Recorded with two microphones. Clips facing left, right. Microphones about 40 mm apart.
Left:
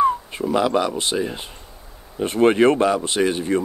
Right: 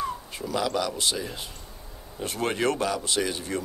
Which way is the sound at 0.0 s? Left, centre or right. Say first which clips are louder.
Left 12 dB; left.